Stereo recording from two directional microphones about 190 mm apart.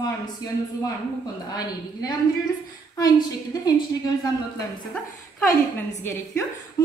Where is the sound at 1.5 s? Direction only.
20° left (ahead or behind).